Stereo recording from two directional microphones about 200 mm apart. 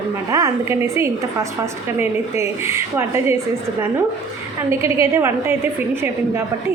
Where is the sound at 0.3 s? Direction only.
15° right (ahead or behind).